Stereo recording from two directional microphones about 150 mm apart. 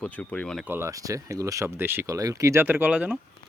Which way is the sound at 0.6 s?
15° right (ahead or behind).